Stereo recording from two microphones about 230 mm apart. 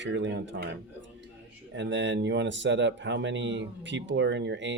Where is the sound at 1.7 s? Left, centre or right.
Right.